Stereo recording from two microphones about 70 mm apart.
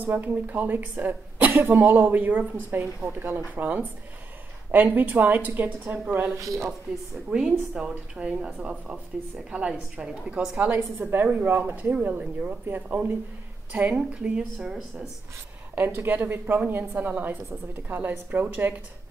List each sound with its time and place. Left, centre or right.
0.0 s speech: right
6.3 s speech: right
7.2 s a woman's voice: centre
15.7 s speech: right